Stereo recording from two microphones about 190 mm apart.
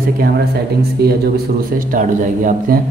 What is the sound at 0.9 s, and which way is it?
A man's voice, 55° right (ahead or behind).